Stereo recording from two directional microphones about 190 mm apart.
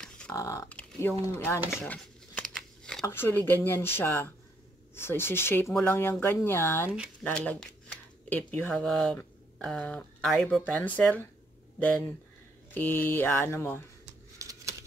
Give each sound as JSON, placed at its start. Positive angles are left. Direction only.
{"t": 0.3, "sound": "speech", "side_deg": 15}
{"t": 12.7, "sound": "speech", "side_deg": 10}
{"t": 14.4, "sound": "a sound", "side_deg": -15}